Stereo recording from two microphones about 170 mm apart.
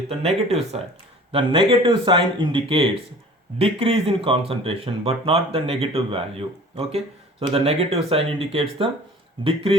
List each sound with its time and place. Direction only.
0.1 s speech: 35° right (ahead or behind)